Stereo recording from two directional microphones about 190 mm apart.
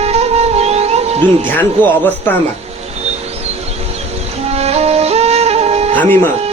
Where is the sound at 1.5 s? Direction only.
10° left (ahead or behind).